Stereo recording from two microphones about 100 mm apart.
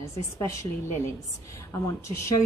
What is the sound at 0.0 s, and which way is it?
Speech, 30° left (ahead or behind).